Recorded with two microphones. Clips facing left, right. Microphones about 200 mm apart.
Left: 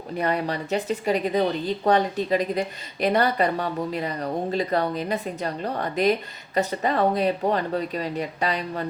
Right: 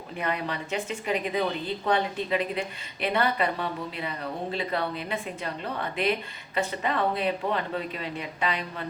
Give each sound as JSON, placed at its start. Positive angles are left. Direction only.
{"t": 0.2, "sound": "a woman's voice", "side_deg": 35}